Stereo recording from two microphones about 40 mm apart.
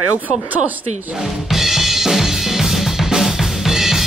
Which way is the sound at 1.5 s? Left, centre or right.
Centre.